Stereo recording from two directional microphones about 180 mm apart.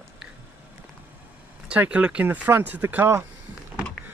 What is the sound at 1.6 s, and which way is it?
Speech, 5° right (ahead or behind).